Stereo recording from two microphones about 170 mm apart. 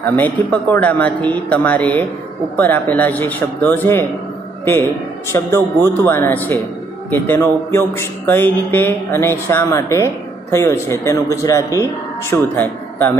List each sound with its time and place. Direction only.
0.0 s speech: 10° left (ahead or behind)
5.3 s speech: 15° left (ahead or behind)